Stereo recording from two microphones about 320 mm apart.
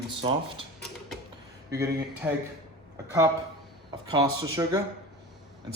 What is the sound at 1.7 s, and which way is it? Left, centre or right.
Speech, centre.